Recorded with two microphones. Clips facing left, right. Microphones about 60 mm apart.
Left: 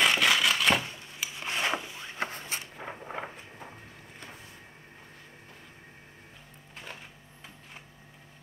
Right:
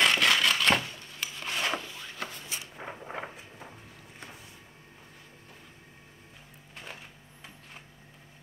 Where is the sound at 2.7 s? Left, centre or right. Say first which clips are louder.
Left 1 dB; centre.